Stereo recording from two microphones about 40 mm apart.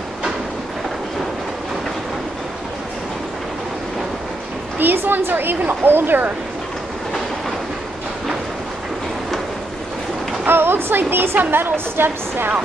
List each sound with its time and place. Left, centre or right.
4.7 s speech: right
10.4 s a woman's voice: right